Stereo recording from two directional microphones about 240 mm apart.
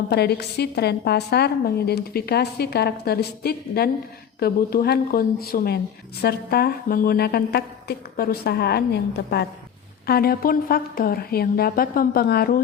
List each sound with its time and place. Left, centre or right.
0.1 s a woman's voice: left